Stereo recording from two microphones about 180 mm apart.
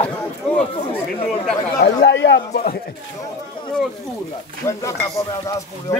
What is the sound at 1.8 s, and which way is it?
Speech, 75° left (ahead or behind).